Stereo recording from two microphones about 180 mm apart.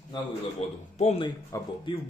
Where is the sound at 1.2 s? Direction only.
25° left (ahead or behind).